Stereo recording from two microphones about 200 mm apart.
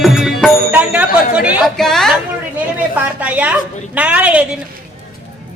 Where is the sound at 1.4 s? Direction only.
5° right (ahead or behind).